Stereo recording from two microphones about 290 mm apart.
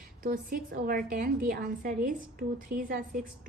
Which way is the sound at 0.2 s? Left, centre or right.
Right.